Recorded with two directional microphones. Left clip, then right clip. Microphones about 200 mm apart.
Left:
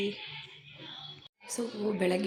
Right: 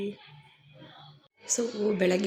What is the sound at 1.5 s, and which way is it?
Speech, 10° right (ahead or behind).